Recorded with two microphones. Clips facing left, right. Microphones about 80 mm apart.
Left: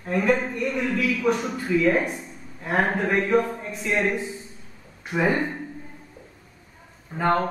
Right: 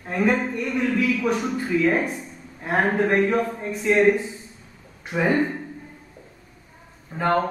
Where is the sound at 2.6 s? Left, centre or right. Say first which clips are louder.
Right 2 dB; centre.